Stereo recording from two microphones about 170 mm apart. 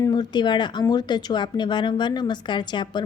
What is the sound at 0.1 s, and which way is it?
Speech, 25° left (ahead or behind).